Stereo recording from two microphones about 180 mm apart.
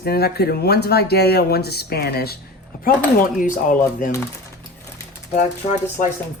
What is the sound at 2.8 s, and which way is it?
Speech, 50° left (ahead or behind).